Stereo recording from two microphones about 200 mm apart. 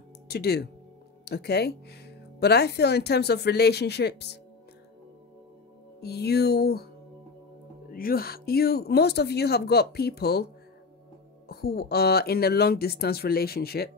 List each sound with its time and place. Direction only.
0.3 s speech: 55° left (ahead or behind)
5.9 s speech: 55° left (ahead or behind)
7.9 s speech: 45° left (ahead or behind)
11.4 s speech: 50° left (ahead or behind)